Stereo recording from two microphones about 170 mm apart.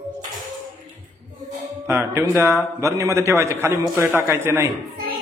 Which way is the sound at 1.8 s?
15° right (ahead or behind).